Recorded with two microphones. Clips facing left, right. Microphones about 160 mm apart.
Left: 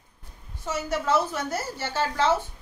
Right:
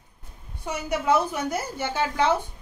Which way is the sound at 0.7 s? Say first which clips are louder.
Right 2 dB; 15° right (ahead or behind).